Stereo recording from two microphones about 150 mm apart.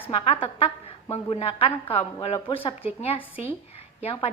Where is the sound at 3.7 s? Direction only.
40° left (ahead or behind).